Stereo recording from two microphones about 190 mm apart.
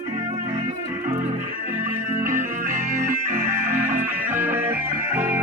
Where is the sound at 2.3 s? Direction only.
40° right (ahead or behind).